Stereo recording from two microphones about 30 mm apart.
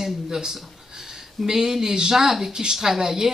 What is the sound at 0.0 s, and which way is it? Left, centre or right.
Speech, centre.